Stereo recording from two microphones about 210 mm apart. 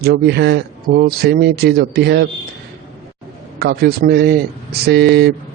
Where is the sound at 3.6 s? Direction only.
45° right (ahead or behind).